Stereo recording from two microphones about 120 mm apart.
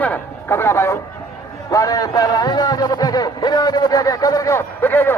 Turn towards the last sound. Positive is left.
turn(degrees=15)  # may be behind; listen again after turning